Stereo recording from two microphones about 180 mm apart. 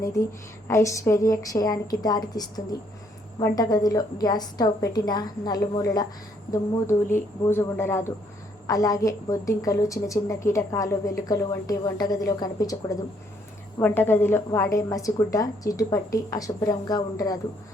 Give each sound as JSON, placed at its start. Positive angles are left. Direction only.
{"t": 0.0, "sound": "a woman's voice", "side_deg": 20}